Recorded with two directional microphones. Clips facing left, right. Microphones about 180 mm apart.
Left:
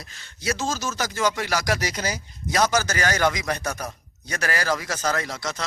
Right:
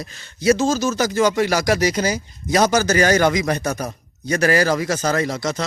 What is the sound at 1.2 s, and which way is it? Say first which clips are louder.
Speech: right 6 dB; 30° right (ahead or behind).